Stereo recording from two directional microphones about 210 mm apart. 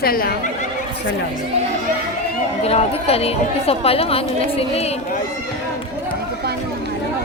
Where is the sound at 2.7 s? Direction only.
30° left (ahead or behind).